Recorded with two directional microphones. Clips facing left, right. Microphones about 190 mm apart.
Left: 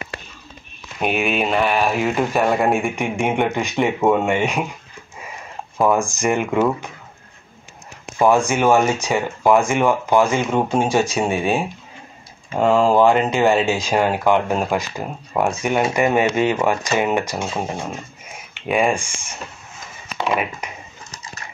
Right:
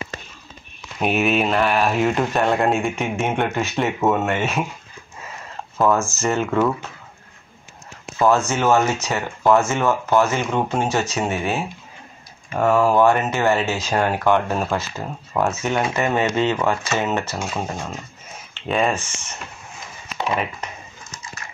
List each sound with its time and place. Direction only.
1.0 s speech: centre (ahead or behind); by 4.6 s 15° left (ahead or behind)
5.8 s speech: 15° left (ahead or behind)
8.2 s speech: 15° left (ahead or behind)
17.4 s speech: 25° left (ahead or behind)
18.5 s speech: 10° left (ahead or behind)
20.6 s a sound: 10° left (ahead or behind)